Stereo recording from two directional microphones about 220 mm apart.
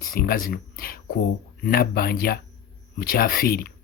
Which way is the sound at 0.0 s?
40° left (ahead or behind).